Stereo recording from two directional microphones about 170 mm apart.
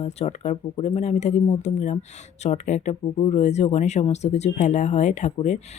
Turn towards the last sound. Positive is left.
turn(degrees=45)  # may be behind; listen again after turning